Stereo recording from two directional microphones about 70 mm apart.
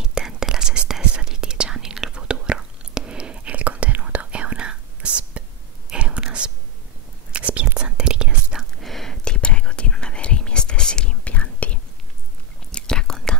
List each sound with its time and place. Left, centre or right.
0.0 s whispering: centre
8.8 s whispering: centre